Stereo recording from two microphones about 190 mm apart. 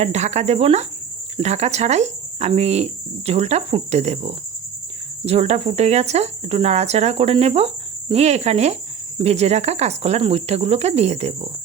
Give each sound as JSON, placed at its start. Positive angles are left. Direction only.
{"t": 0.0, "sound": "speech", "side_deg": -35}